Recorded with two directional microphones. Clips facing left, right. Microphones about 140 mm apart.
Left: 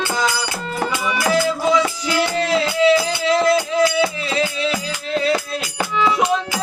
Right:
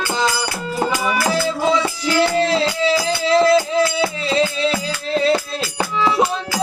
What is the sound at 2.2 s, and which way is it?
Music, 30° right (ahead or behind).